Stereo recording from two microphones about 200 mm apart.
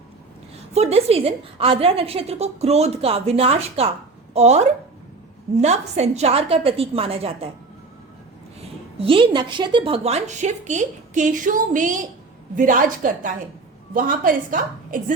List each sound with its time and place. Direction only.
0.7 s a woman's voice: 30° right (ahead or behind)
9.0 s a woman's voice: 25° right (ahead or behind); by 15.0 s 45° right (ahead or behind)